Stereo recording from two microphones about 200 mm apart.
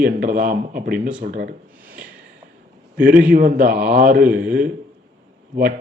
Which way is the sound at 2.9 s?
45° right (ahead or behind).